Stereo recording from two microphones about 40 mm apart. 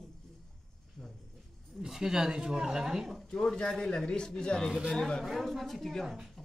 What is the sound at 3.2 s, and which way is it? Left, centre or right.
Speech, centre.